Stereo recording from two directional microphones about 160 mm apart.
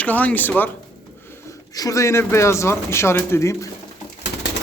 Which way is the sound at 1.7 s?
20° left (ahead or behind).